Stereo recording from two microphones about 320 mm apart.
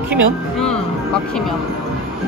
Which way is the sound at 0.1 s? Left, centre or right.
Centre.